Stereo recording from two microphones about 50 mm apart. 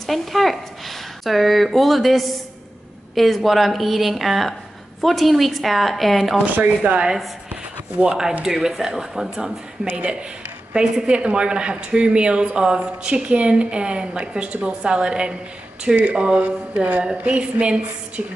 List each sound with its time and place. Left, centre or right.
0.0 s speech: centre
6.4 s speech: right
8.5 s speech: centre
9.8 s speech: right
10.7 s speech: centre